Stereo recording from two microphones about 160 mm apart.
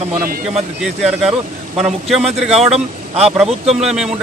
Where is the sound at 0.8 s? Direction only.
5° right (ahead or behind).